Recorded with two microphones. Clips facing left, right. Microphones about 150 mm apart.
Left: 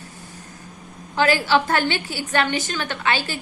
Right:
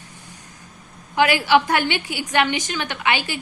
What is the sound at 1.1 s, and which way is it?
A woman's voice, 15° right (ahead or behind).